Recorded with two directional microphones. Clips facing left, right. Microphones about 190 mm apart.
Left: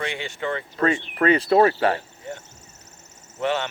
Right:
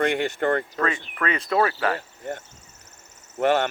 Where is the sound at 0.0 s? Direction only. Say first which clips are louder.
Right 6 dB; 55° right (ahead or behind).